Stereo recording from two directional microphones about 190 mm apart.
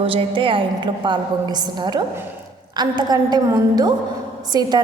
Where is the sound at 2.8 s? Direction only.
20° right (ahead or behind).